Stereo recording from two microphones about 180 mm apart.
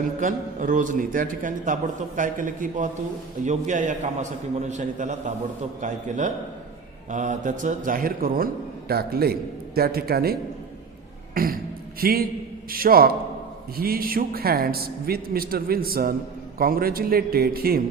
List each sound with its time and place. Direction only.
0.2 s a man's voice: 45° right (ahead or behind)
11.3 s beatboxing: 55° right (ahead or behind)
12.7 s a man's voice: 55° right (ahead or behind)